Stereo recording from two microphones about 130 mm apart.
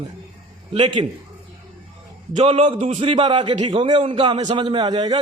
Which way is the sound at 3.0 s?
40° right (ahead or behind).